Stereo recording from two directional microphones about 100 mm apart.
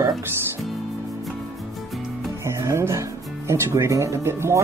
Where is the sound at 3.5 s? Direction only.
30° right (ahead or behind).